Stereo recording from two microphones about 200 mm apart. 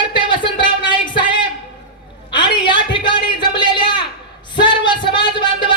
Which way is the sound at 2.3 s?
25° left (ahead or behind).